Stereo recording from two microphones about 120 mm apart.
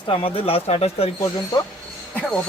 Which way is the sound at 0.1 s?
55° left (ahead or behind).